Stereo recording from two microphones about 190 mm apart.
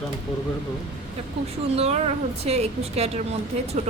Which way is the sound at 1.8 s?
35° right (ahead or behind).